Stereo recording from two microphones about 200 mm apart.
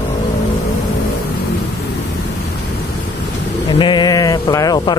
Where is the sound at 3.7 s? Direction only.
25° left (ahead or behind).